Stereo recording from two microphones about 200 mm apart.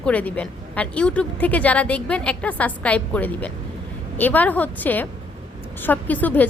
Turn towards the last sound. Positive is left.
turn(degrees=10)  # may be behind; listen again after turning